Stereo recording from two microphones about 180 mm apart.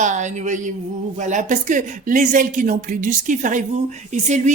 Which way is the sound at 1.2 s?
45° right (ahead or behind).